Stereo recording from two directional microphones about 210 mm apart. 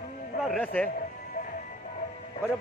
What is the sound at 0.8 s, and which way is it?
Music, 45° left (ahead or behind).